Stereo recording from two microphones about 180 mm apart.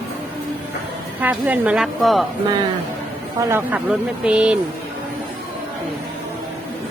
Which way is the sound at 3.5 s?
10° right (ahead or behind).